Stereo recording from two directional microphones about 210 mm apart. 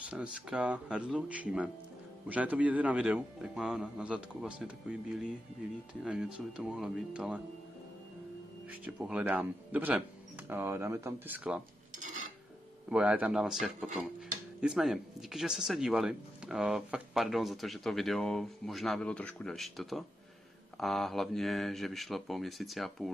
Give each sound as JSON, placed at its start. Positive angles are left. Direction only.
{"t": 0.0, "sound": "speech", "side_deg": -5}
{"t": 8.6, "sound": "speech", "side_deg": -5}
{"t": 12.0, "sound": "a sound", "side_deg": -35}
{"t": 12.9, "sound": "speech", "side_deg": -5}